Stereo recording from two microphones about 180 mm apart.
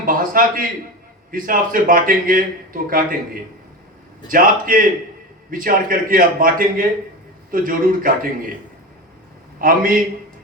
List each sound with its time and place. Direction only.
0.0 s a sound: 50° right (ahead or behind)
1.3 s a man's voice: 50° right (ahead or behind)
4.3 s a man's voice: 50° right (ahead or behind)
9.6 s a man's voice: 50° right (ahead or behind)